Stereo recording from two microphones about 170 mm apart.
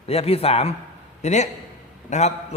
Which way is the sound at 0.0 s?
35° left (ahead or behind).